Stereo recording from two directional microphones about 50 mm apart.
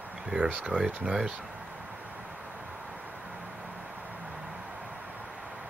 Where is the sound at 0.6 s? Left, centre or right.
Right.